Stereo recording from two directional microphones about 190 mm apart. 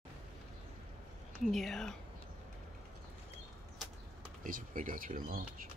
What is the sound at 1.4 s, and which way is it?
Speech, centre (ahead or behind).